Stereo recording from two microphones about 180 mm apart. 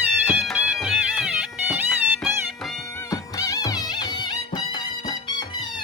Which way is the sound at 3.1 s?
20° left (ahead or behind).